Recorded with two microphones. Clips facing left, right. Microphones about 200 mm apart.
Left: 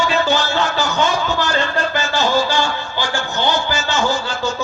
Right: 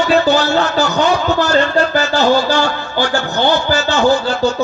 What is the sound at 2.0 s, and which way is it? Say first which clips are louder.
Speech: right 5 dB; 65° right (ahead or behind).